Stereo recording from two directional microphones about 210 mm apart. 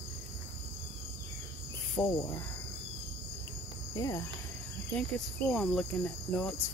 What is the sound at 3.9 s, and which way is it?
Insect, 15° left (ahead or behind).